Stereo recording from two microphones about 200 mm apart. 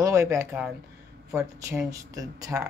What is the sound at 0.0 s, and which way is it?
A woman's voice, 15° right (ahead or behind).